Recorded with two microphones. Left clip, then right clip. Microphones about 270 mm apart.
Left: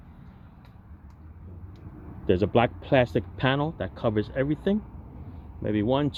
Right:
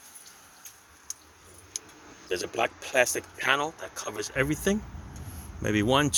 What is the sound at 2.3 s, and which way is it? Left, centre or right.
Speech, centre.